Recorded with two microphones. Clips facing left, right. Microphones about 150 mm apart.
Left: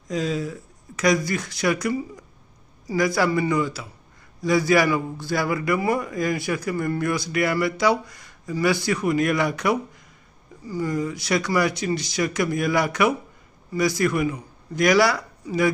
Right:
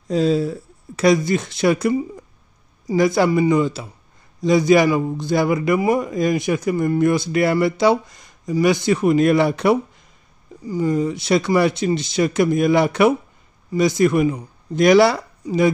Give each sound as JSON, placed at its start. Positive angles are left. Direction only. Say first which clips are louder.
{"t": 0.1, "sound": "a man's voice", "louder": "right 8 dB", "side_deg": -30}